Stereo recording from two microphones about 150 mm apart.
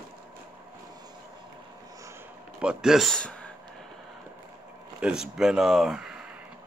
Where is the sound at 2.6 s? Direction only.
5° right (ahead or behind).